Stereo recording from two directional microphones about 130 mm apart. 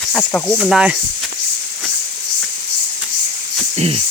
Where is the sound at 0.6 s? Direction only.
5° right (ahead or behind).